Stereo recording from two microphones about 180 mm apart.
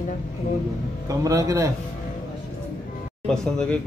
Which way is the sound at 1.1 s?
20° right (ahead or behind).